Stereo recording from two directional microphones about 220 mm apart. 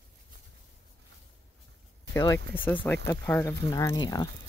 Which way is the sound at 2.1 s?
15° left (ahead or behind).